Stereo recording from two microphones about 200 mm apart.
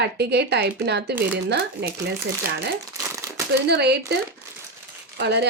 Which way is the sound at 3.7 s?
55° right (ahead or behind).